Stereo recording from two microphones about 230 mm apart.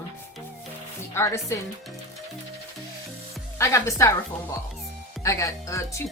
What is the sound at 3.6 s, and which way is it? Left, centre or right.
Speech, centre.